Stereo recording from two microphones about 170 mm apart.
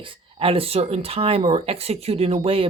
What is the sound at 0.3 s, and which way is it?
Speech, 35° right (ahead or behind).